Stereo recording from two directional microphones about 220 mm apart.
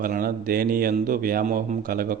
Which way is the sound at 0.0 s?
40° right (ahead or behind).